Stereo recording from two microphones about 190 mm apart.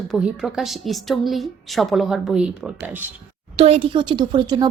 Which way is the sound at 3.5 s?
30° right (ahead or behind).